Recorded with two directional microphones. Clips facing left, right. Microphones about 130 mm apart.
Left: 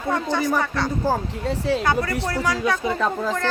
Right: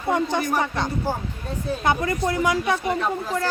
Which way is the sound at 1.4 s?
90° left.